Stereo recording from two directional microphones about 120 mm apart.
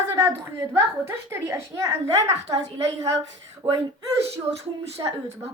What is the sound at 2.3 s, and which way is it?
A woman's voice, 65° right (ahead or behind).